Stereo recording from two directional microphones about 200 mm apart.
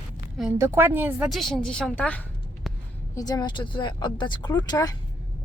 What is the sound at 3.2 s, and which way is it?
Speech, 20° left (ahead or behind).